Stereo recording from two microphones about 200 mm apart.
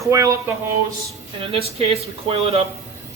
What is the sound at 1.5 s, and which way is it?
Speech, 30° right (ahead or behind).